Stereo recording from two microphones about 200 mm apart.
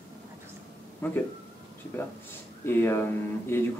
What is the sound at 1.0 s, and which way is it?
Speech, 10° left (ahead or behind).